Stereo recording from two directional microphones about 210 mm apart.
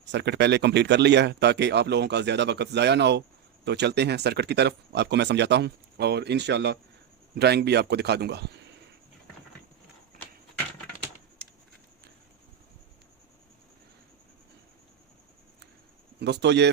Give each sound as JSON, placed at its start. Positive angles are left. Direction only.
{"t": 0.0, "sound": "speech", "side_deg": -55}
{"t": 16.2, "sound": "speech", "side_deg": -55}